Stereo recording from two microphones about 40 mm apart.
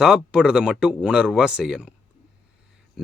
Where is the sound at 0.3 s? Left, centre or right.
Right.